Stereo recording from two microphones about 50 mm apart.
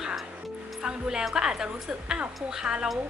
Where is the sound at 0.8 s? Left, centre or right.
Centre.